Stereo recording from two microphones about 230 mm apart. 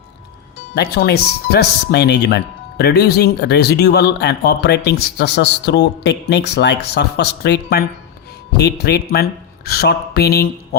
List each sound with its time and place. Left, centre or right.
0.7 s speech: left